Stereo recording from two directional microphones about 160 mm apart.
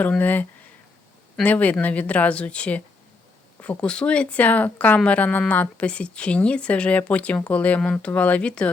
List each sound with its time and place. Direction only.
0.0 s speech: 10° left (ahead or behind)